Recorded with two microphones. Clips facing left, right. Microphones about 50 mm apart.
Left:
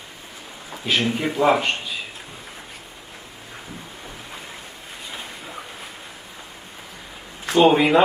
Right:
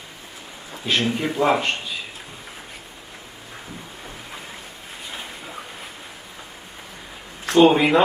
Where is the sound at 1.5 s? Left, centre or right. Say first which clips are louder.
Left 2 dB; centre.